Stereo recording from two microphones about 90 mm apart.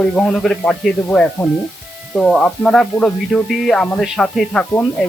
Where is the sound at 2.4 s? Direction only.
10° left (ahead or behind).